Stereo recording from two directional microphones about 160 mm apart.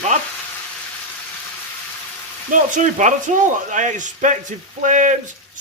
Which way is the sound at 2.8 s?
50° right (ahead or behind).